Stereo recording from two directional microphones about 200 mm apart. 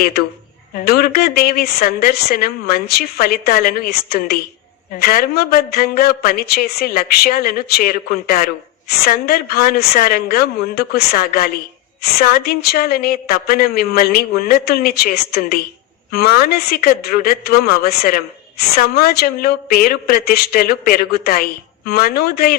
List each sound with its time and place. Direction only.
0.9 s speech: 50° left (ahead or behind)